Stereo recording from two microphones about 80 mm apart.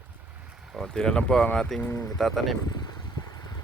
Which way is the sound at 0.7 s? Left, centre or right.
Centre.